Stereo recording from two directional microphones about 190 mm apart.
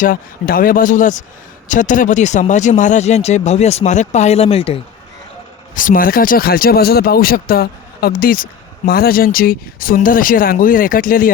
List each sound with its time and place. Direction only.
0.0 s speech: 50° left (ahead or behind); by 4.8 s 30° left (ahead or behind)
5.7 s speech: 45° left (ahead or behind)